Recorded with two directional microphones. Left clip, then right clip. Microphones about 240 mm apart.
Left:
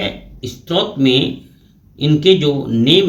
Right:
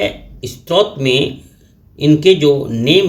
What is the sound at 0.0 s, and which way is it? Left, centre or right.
Speech, right.